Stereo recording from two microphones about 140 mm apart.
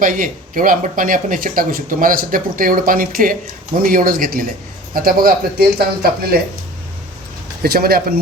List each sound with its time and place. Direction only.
0.0 s speech: 75° right (ahead or behind)
7.6 s speech: 90° right